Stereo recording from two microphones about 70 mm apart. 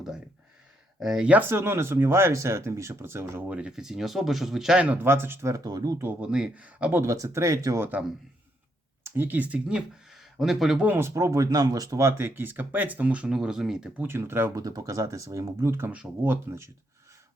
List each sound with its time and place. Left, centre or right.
0.9 s speech: centre
1.3 s speech: right
3.4 s speech: right
3.7 s speech: centre
4.9 s speech: right
5.5 s speech: right
6.0 s speech: right
6.2 s speech: centre
7.0 s speech: right
9.1 s speech: right; by 10.8 s centre
10.8 s speech: right
11.1 s speech: right; by 13.9 s centre
13.9 s speech: right
14.5 s speech: right